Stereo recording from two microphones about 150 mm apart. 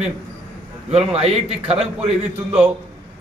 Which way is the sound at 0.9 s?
45° right (ahead or behind).